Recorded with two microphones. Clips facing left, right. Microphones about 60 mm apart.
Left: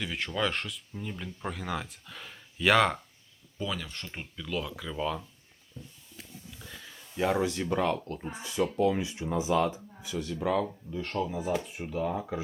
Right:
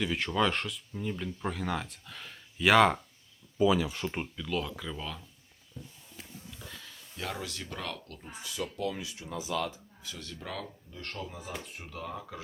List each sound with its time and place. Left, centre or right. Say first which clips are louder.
0.0 s speech: right 2 dB; centre
4.4 s speech: right 1 dB; centre
4.9 s speech: left 9 dB; centre
6.6 s a sound: left 1 dB; centre
7.2 s speech: left 11 dB; left
10.0 s speech: left 11 dB; centre